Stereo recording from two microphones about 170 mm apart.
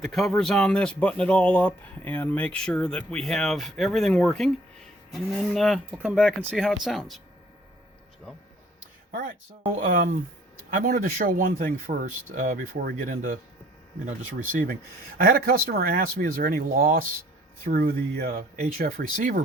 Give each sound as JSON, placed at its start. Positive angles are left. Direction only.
{"t": 0.0, "sound": "speech", "side_deg": 0}
{"t": 5.9, "sound": "speech", "side_deg": -10}
{"t": 9.8, "sound": "speech", "side_deg": -55}
{"t": 15.2, "sound": "speech", "side_deg": -60}